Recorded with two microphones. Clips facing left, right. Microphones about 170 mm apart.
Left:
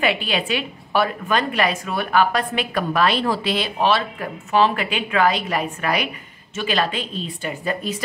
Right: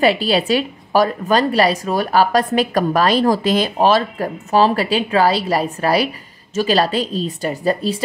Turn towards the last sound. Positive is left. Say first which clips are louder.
# right 6 dB
turn(degrees=-35)  # may be behind; listen again after turning